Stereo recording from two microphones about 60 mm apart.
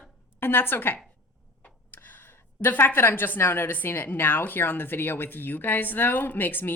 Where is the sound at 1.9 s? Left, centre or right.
Left.